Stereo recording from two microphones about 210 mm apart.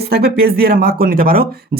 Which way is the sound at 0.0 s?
50° right (ahead or behind).